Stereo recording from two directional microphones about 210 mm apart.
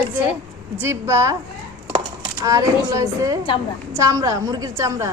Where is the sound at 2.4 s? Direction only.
15° right (ahead or behind).